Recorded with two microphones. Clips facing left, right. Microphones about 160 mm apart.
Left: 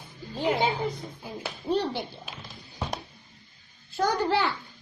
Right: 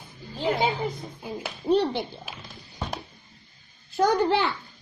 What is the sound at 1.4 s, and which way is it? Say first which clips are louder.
Speech: right 5 dB; 20° right (ahead or behind).